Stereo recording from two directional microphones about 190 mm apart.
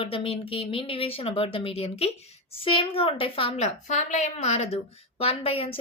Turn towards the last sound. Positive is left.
turn(degrees=30)  # may be behind; listen again after turning